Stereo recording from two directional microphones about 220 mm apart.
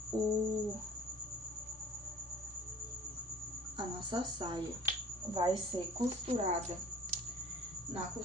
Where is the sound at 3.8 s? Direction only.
20° right (ahead or behind).